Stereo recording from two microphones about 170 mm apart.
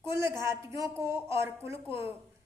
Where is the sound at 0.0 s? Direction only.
15° right (ahead or behind).